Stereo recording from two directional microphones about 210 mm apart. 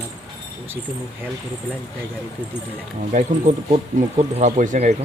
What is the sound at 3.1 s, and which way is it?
Speech, 35° right (ahead or behind).